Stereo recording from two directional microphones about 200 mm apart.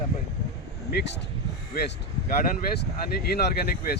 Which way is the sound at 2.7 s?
50° left (ahead or behind).